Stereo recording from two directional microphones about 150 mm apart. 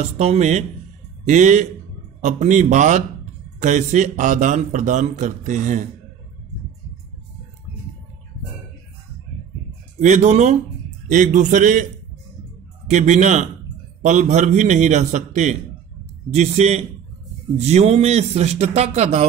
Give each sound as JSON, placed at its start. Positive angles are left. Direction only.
{"t": 0.0, "sound": "a man's voice", "side_deg": -45}
{"t": 9.9, "sound": "a man's voice", "side_deg": -50}
{"t": 12.9, "sound": "a man's voice", "side_deg": -55}